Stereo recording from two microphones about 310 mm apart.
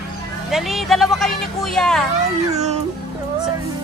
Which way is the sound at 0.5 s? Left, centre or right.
Centre.